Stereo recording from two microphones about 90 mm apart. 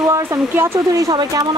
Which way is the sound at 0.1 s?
30° right (ahead or behind).